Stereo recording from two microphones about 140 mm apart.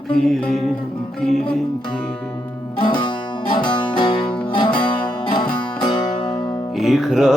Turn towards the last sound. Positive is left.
turn(degrees=-5)  # may be behind; listen again after turning